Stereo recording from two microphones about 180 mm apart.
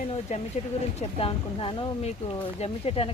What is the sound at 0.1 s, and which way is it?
Speech, 40° left (ahead or behind).